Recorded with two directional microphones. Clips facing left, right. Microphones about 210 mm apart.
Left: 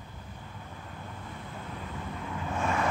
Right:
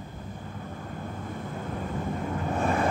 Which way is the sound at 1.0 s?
45° right (ahead or behind).